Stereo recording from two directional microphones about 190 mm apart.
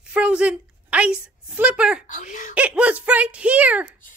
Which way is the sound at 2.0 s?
40° left (ahead or behind).